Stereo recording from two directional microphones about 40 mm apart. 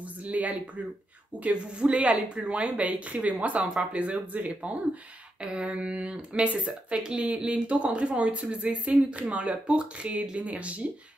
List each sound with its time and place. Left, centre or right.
0.0 s a sound: right
1.4 s speech: right
3.5 s speech: centre
3.9 s speech: right
5.4 s speech: right
6.6 s speech: right